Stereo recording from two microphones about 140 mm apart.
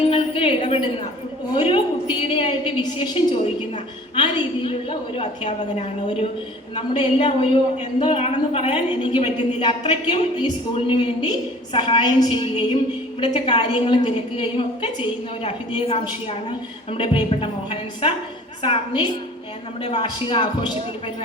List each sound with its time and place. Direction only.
0.1 s a sound: 35° left (ahead or behind)
1.5 s a woman's voice: 40° left (ahead or behind)
4.1 s a woman's voice: 35° left (ahead or behind)
6.7 s a woman's voice: 35° left (ahead or behind)
16.9 s a woman's voice: 40° left (ahead or behind)